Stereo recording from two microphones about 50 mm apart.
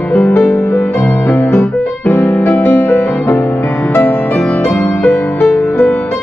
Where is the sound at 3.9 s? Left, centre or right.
Left.